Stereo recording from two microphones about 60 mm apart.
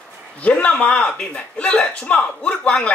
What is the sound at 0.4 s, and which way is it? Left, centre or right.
Speech, left.